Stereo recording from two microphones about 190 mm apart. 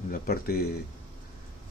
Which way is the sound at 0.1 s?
55° left (ahead or behind).